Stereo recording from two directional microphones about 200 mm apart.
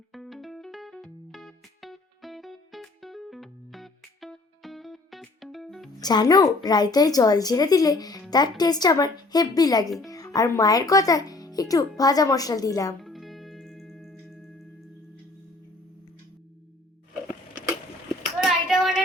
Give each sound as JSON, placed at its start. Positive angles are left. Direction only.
{"t": 0.1, "sound": "music", "side_deg": 0}
{"t": 6.0, "sound": "a woman's voice", "side_deg": 20}
{"t": 9.8, "sound": "speech", "side_deg": 0}
{"t": 10.1, "sound": "a child's voice", "side_deg": 20}
{"t": 13.0, "sound": "music", "side_deg": 0}
{"t": 18.3, "sound": "a sound", "side_deg": 0}